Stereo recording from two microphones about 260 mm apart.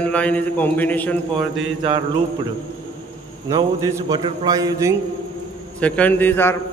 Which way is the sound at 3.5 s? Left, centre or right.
Centre.